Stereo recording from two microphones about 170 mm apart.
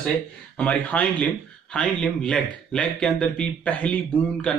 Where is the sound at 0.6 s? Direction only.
10° left (ahead or behind).